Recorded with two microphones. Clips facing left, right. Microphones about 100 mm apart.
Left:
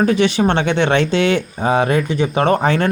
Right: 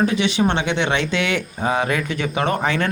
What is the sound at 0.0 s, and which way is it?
Speech, 45° left (ahead or behind).